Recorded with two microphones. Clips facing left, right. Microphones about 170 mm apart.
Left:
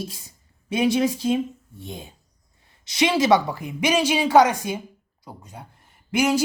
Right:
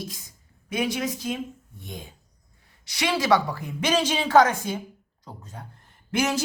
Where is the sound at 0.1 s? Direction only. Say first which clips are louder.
Even; 25° left (ahead or behind).